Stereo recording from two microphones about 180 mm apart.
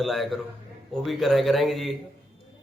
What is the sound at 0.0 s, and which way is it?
Speech, centre (ahead or behind).